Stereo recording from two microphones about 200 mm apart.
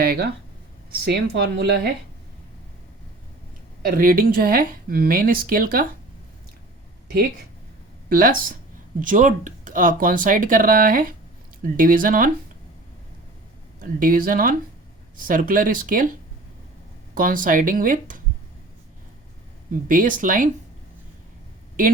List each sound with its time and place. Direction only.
0.0 s speech: 50° right (ahead or behind)
3.8 s speech: 45° right (ahead or behind)
8.1 s speech: 45° right (ahead or behind)
13.7 s speech: 45° right (ahead or behind)
17.2 s speech: 45° right (ahead or behind)
19.9 s speech: 40° right (ahead or behind)